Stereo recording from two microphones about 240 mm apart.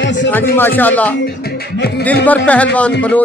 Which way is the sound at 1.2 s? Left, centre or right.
Left.